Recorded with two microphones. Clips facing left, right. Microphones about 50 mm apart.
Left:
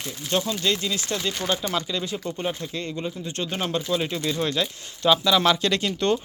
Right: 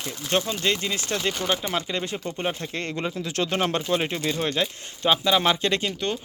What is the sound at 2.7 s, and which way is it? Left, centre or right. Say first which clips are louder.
Speech: right 1 dB; right.